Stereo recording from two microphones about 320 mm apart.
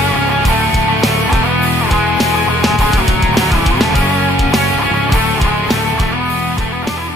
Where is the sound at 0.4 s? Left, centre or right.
Centre.